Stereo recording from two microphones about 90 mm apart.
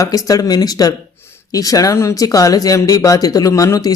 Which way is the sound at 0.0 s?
40° left (ahead or behind).